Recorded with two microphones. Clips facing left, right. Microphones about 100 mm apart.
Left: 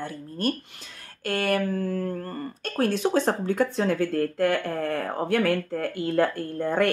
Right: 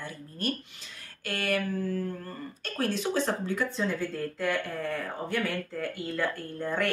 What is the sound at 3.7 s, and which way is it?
Speech, 75° left (ahead or behind).